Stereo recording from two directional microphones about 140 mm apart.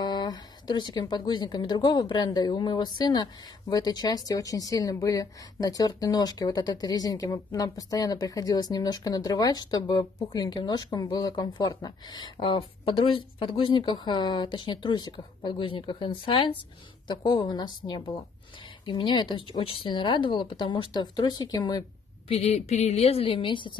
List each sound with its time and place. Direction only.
0.0 s speech: 30° left (ahead or behind)
22.3 s a woman's voice: 50° left (ahead or behind)